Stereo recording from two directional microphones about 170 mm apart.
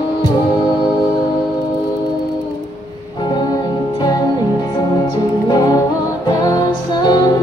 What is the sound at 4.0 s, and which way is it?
Music, 20° left (ahead or behind).